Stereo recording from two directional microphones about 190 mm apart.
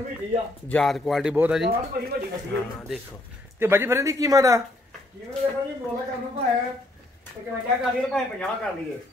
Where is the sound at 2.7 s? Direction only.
Centre (ahead or behind).